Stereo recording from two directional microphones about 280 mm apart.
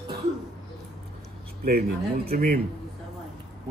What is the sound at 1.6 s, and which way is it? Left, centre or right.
Speech, right.